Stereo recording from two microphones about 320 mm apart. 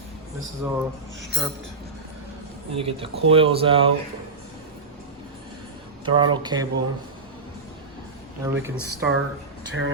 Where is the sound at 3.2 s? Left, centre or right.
Centre.